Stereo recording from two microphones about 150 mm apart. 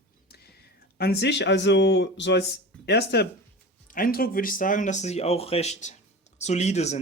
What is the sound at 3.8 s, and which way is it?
Speech, 70° left (ahead or behind).